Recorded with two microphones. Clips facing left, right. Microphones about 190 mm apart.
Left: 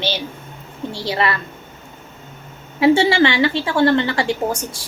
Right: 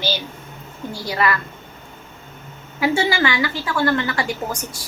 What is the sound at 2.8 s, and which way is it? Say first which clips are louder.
A woman's voice: left 6 dB; 30° left (ahead or behind).